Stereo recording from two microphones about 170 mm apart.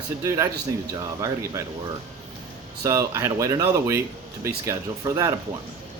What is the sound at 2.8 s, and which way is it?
A man's voice, 20° right (ahead or behind).